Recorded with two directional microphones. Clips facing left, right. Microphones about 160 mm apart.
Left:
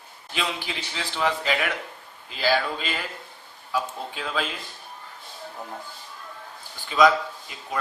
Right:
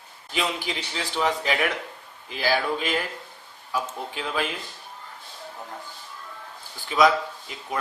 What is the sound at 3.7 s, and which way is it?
Speech, 15° right (ahead or behind).